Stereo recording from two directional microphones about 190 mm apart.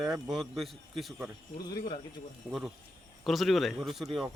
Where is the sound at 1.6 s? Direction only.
20° left (ahead or behind).